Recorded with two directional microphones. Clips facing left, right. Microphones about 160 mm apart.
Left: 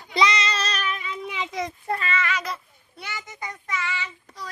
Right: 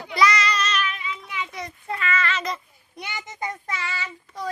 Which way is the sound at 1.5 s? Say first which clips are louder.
Left 6 dB; 90° left.